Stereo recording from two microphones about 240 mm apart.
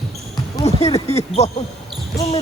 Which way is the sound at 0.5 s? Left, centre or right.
Left.